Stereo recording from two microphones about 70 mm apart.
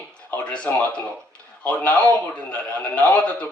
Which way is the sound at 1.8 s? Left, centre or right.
Centre.